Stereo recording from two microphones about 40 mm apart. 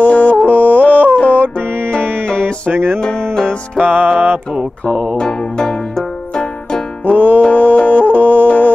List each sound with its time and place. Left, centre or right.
0.0 s music: left
2.7 s music: right
3.0 s music: left
3.8 s music: right
5.1 s music: centre
7.1 s music: left